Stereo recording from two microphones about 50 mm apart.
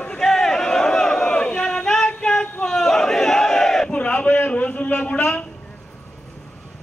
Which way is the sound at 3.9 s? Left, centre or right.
Left.